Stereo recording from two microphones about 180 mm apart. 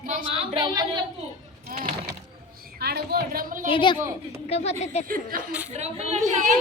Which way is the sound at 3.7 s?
30° left (ahead or behind).